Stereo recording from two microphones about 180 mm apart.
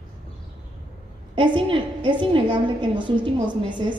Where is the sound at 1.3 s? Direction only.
25° right (ahead or behind).